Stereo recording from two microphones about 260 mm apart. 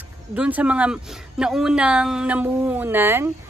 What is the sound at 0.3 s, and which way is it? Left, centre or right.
Speech, centre.